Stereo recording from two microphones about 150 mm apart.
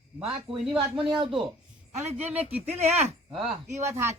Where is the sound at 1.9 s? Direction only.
50° right (ahead or behind).